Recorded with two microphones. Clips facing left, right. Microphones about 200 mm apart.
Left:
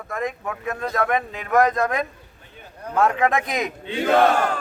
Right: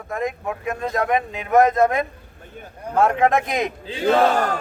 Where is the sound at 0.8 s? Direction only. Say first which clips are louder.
Right 1 dB; 20° right (ahead or behind).